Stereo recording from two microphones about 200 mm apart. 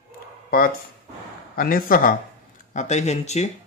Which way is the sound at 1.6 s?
45° left (ahead or behind).